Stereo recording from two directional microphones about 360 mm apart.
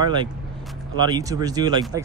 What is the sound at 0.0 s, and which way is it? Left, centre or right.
Speech, centre.